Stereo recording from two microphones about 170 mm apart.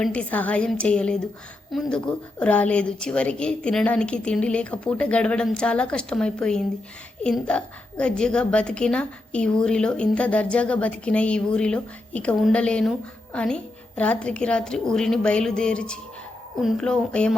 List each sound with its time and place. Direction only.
0.0 s a woman's voice: 5° left (ahead or behind)